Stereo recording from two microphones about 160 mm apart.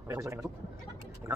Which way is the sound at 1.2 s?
15° right (ahead or behind).